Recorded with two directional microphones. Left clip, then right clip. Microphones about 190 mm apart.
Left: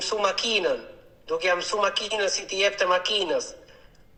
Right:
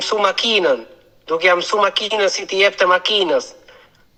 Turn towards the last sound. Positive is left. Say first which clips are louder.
# right 8 dB
turn(degrees=-25)  # may be behind; listen again after turning